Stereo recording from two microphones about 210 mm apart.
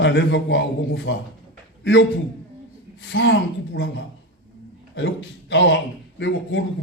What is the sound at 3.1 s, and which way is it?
Speech, 60° left (ahead or behind).